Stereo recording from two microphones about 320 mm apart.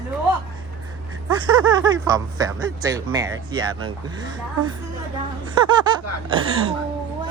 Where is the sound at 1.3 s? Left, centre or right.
Centre.